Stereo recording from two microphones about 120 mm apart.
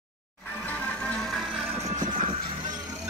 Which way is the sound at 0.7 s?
10° left (ahead or behind).